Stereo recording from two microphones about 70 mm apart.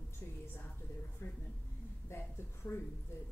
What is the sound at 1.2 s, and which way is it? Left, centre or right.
A woman's voice, left.